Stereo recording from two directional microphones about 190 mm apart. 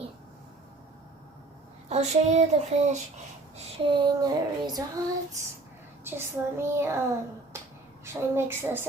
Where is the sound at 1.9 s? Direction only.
35° right (ahead or behind).